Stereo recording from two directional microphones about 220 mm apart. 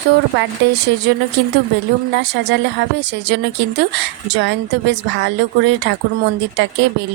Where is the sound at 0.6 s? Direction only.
50° right (ahead or behind).